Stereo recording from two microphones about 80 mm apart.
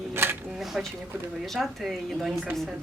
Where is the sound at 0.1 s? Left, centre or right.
Right.